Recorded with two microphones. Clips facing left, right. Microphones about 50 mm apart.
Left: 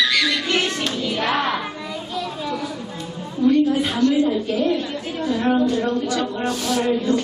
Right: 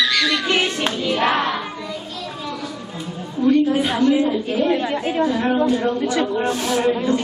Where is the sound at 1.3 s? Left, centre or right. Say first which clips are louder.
Right 1 dB; centre.